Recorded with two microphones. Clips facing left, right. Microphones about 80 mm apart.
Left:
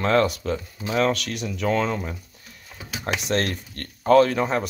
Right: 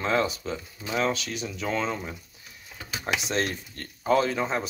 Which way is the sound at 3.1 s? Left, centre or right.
Left.